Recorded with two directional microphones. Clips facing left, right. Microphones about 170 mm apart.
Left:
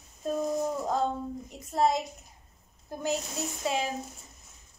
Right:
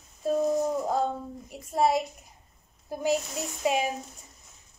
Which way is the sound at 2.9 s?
10° right (ahead or behind).